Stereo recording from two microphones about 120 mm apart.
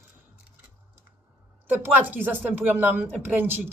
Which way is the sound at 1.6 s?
15° right (ahead or behind).